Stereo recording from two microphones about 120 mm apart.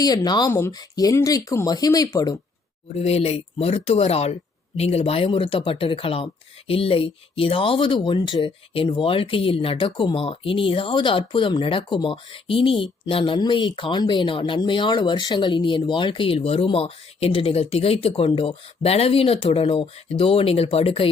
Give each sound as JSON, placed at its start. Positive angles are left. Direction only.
{"t": 0.0, "sound": "speech", "side_deg": 35}
{"t": 3.0, "sound": "speech", "side_deg": 60}